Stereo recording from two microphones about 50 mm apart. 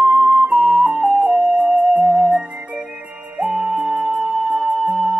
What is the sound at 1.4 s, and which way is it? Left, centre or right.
Music, right.